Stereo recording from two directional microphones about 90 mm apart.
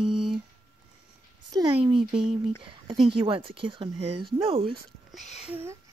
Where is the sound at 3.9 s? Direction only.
85° right.